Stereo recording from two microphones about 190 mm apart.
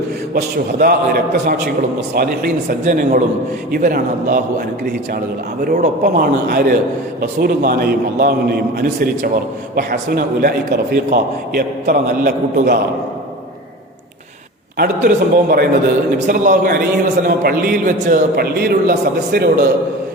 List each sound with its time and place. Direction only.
0.3 s a man's voice: 55° right (ahead or behind)
5.6 s a man's voice: 50° right (ahead or behind)
14.8 s a man's voice: 50° right (ahead or behind)